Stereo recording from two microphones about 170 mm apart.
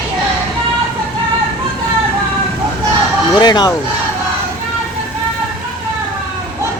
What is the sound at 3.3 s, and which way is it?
Speech, 25° left (ahead or behind).